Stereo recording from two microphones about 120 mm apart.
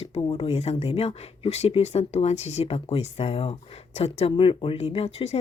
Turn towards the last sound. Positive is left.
turn(degrees=60)  # may be behind; listen again after turning